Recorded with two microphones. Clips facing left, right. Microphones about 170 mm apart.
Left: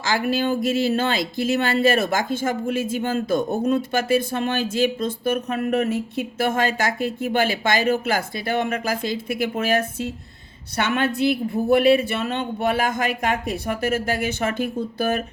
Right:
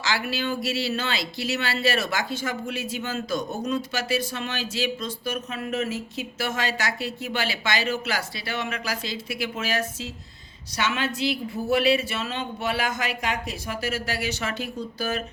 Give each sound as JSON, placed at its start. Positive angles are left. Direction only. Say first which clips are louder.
{"t": 0.0, "sound": "speech", "louder": "left 6 dB", "side_deg": 50}